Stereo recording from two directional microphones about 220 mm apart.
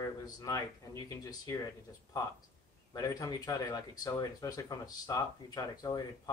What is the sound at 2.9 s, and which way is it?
Speech, 15° left (ahead or behind).